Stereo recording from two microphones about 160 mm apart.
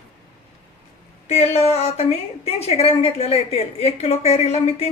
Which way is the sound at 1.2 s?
40° left (ahead or behind).